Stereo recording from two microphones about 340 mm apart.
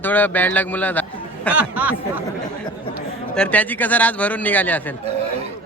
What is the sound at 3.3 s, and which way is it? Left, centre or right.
A man's voice, centre.